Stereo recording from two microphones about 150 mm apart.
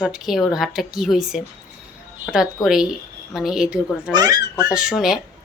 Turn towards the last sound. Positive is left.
turn(degrees=0)  # may be behind; listen again after turning